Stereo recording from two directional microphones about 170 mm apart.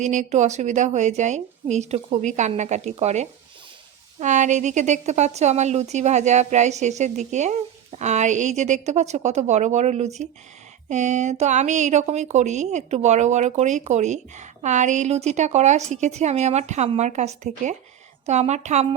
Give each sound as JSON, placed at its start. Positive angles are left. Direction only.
{"t": 0.0, "sound": "a woman's voice", "side_deg": -45}